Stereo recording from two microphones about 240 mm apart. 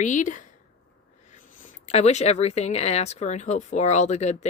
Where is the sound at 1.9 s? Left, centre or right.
Left.